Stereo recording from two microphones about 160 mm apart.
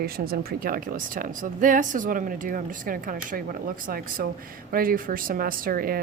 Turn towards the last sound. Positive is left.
turn(degrees=-65)  # may be behind; listen again after turning